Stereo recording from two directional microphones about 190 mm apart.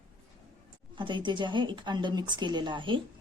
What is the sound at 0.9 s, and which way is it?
A woman's voice, 25° right (ahead or behind).